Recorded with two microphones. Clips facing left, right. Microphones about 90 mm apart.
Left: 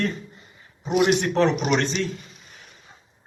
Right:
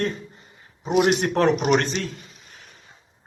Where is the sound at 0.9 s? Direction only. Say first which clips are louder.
Even; 50° right (ahead or behind).